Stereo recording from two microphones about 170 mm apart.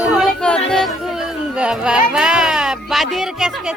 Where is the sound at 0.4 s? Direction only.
5° left (ahead or behind).